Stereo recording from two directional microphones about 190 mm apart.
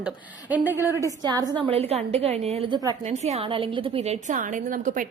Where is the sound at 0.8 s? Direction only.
15° right (ahead or behind).